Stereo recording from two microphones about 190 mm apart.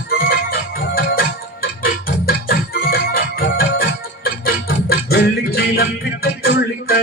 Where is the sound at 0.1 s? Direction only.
50° left (ahead or behind).